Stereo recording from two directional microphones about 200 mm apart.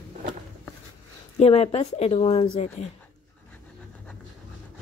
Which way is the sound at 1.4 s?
30° left (ahead or behind).